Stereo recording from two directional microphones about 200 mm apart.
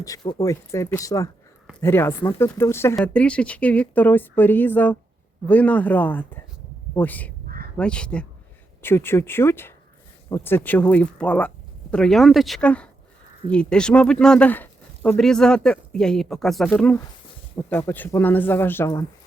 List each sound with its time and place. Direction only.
0.3 s speech: 15° left (ahead or behind)
7.4 s crow: 50° right (ahead or behind)
7.8 s speech: 5° left (ahead or behind)